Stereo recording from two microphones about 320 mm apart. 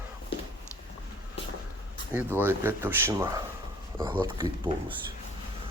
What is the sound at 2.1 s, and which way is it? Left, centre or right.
Speech, centre.